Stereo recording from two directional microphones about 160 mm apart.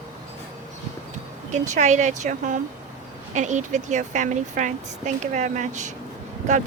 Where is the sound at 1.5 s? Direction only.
50° right (ahead or behind).